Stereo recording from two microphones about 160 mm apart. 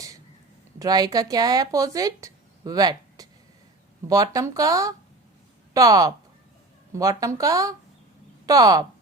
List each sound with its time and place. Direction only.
0.8 s speech: 25° right (ahead or behind)